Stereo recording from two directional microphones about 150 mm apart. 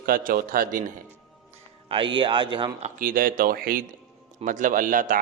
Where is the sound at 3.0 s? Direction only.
70° right (ahead or behind).